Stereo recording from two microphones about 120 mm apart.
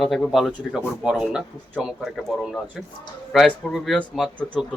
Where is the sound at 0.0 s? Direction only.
Centre (ahead or behind).